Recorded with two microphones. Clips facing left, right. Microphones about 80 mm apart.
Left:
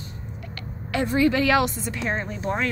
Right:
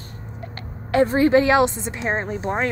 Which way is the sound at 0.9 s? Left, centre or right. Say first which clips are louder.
Right 5 dB; right.